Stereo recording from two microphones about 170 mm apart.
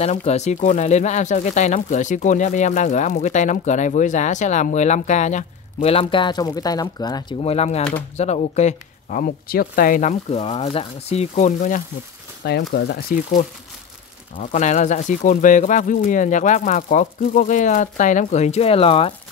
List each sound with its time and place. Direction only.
0.0 s speech: 40° left (ahead or behind)
7.4 s speech: 40° left (ahead or behind)
9.2 s speech: 60° left (ahead or behind)
12.4 s speech: 75° left (ahead or behind)
14.4 s speech: 45° left (ahead or behind)